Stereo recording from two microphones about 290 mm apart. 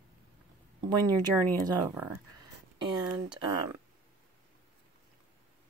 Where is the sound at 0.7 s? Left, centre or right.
Centre.